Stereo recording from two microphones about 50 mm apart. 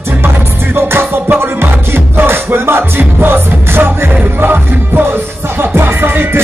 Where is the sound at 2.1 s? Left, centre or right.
Right.